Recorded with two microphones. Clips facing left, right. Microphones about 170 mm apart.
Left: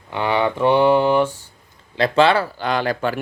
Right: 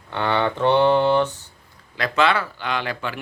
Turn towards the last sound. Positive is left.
turn(degrees=40)  # may be behind; listen again after turning